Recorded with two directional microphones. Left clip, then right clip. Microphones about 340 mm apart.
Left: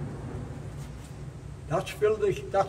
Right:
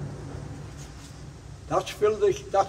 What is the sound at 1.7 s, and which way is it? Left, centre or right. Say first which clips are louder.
Speech: right 2 dB; centre.